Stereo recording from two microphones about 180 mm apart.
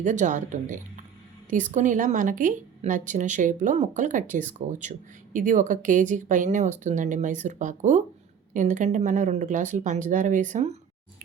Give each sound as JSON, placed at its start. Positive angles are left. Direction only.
{"t": 0.0, "sound": "a woman's voice", "side_deg": -45}